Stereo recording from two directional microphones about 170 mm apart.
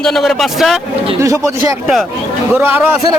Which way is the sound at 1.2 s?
20° right (ahead or behind).